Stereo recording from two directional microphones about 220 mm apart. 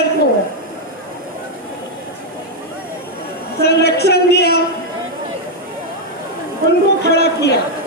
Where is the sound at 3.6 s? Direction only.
50° left (ahead or behind).